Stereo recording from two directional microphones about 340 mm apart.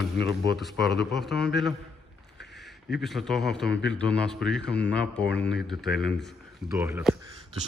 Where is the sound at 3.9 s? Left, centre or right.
Centre.